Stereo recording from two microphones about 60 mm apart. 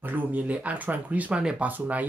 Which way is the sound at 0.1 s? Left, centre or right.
Right.